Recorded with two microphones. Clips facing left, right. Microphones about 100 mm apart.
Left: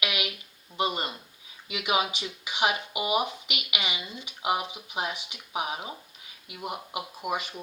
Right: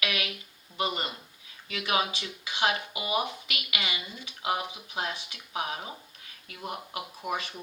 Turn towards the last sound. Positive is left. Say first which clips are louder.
# left 2 dB
turn(degrees=10)  # may be behind; listen again after turning